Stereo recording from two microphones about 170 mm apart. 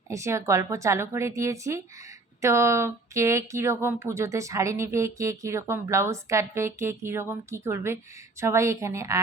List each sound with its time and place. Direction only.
0.1 s speech: 15° right (ahead or behind)